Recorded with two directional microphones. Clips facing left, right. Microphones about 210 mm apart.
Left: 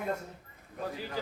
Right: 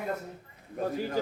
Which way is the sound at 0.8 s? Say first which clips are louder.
Right 7 dB; 45° right (ahead or behind).